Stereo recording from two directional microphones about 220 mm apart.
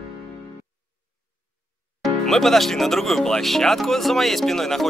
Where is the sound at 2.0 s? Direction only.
Centre (ahead or behind).